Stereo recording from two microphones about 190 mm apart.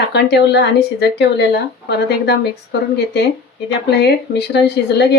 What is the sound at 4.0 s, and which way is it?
Speech, 60° left (ahead or behind).